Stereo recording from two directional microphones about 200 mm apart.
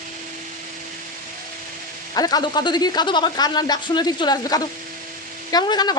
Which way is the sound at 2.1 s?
20° left (ahead or behind).